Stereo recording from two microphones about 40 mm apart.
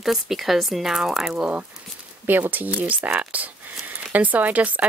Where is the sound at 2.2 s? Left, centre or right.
Right.